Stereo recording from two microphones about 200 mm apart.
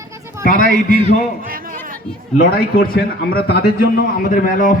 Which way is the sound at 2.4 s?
45° left (ahead or behind).